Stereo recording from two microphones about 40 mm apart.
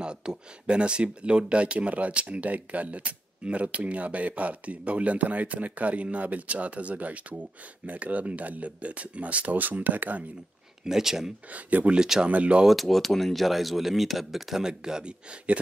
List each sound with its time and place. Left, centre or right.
0.0 s speech: right
9.6 s speech: right
10.8 s speech: centre
11.5 s speech: right
12.0 s speech: centre
12.3 s speech: right
12.6 s speech: centre
14.7 s speech: centre